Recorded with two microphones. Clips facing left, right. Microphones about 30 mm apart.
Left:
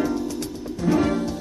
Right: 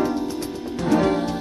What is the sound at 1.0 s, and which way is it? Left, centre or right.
Music, right.